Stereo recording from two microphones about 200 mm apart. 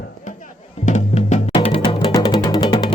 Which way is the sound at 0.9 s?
35° left (ahead or behind).